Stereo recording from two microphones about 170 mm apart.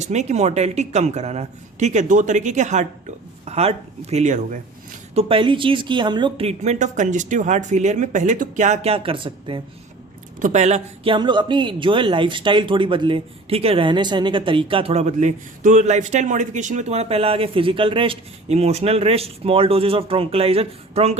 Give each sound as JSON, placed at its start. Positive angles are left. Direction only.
{"t": 0.0, "sound": "speech", "side_deg": -40}
{"t": 5.1, "sound": "speech", "side_deg": -30}
{"t": 10.4, "sound": "speech", "side_deg": -45}